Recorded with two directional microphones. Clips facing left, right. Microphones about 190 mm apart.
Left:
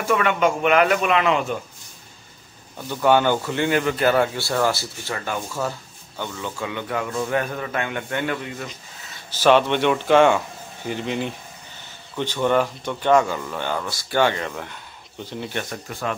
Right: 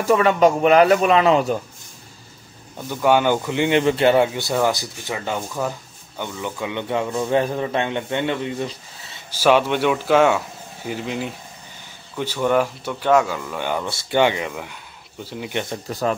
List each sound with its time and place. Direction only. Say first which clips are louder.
0.0 s a man's voice: right 5 dB; 35° right (ahead or behind)
2.9 s speech: right 1 dB; 10° right (ahead or behind)
3.8 s speech: right 3 dB; 25° right (ahead or behind)
9.3 s speech: even; 10° right (ahead or behind)
13.8 s speech: right 2 dB; 20° right (ahead or behind)
15.9 s a man's voice: right 6 dB; 40° right (ahead or behind)